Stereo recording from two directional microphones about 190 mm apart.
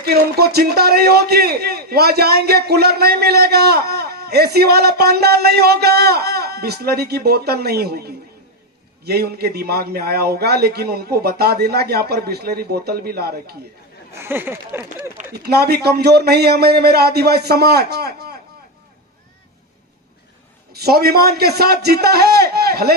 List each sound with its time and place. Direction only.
0.0 s a man's voice: 55° right (ahead or behind)
14.1 s speech: 15° right (ahead or behind)
15.3 s a man's voice: 55° right (ahead or behind)
20.7 s a man's voice: 55° right (ahead or behind)